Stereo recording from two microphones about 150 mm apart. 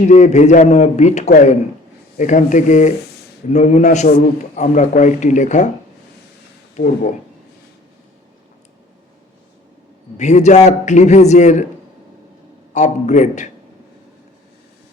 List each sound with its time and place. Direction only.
0.0 s a man's voice: 50° left (ahead or behind)
6.7 s a man's voice: 55° left (ahead or behind)
10.2 s a man's voice: 50° left (ahead or behind)
12.7 s a man's voice: 50° left (ahead or behind)